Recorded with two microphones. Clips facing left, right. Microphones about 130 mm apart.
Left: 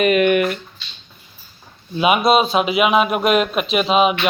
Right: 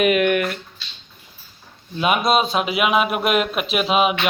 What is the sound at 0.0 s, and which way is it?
Speech, centre (ahead or behind).